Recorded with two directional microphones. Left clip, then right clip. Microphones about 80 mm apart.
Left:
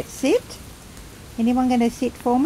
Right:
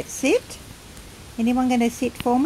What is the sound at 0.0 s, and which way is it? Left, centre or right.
Speech, centre.